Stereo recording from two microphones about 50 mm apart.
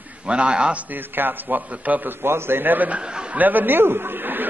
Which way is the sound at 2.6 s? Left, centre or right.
Right.